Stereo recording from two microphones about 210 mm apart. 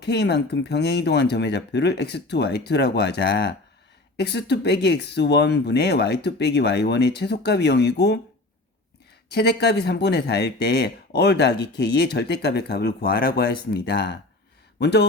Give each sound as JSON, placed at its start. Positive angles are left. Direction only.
{"t": 0.0, "sound": "speech", "side_deg": 50}
{"t": 9.3, "sound": "speech", "side_deg": 50}